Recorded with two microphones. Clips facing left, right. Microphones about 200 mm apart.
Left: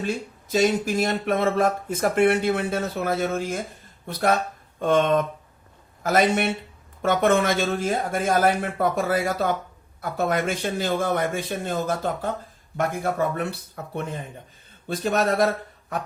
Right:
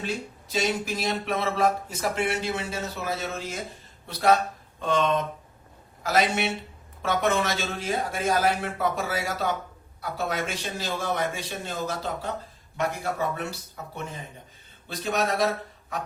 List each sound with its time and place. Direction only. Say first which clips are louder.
0.0 s speech: left 4 dB; 50° left (ahead or behind)